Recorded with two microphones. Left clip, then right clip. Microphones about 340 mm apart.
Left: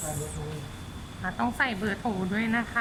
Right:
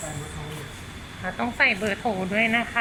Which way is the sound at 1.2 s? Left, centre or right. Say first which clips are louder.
Right 5 dB; centre.